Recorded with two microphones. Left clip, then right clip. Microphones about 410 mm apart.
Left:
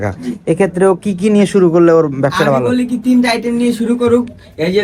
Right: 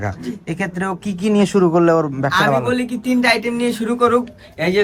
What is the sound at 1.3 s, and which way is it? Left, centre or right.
Speech, centre.